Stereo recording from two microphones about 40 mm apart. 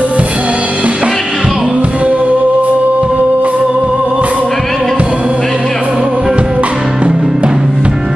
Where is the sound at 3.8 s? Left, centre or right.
Right.